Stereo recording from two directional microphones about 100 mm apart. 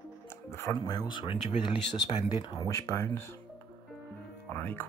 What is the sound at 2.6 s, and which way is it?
Speech, 30° left (ahead or behind).